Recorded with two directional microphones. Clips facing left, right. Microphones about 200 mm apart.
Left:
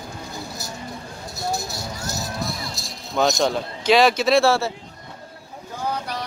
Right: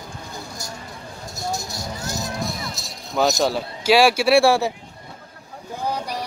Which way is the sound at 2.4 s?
Centre (ahead or behind).